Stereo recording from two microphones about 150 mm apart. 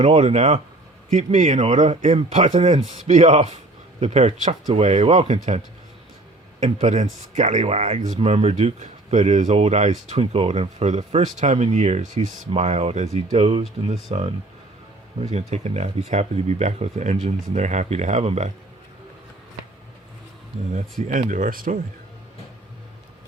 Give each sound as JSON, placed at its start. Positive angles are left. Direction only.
{"t": 0.0, "sound": "speech", "side_deg": -45}
{"t": 20.5, "sound": "speech", "side_deg": -45}
{"t": 21.1, "sound": "speech", "side_deg": -60}